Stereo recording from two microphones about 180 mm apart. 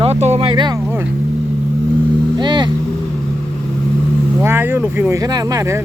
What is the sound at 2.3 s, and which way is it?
Vehicle, 25° right (ahead or behind).